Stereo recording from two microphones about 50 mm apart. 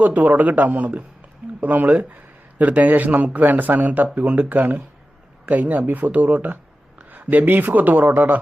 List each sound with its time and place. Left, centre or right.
0.0 s a man's voice: right